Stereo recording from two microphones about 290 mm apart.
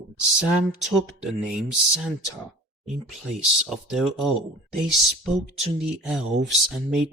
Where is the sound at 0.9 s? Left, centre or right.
Centre.